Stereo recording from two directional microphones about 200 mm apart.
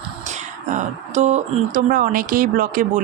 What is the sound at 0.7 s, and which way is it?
Speech, 35° right (ahead or behind).